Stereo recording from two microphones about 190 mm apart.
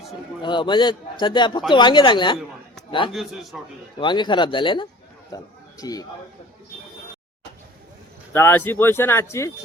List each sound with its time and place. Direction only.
0.4 s speech: 25° left (ahead or behind)
3.1 s a man's voice: centre (ahead or behind)
4.0 s a man's voice: 25° left (ahead or behind)
8.3 s speech: 10° left (ahead or behind)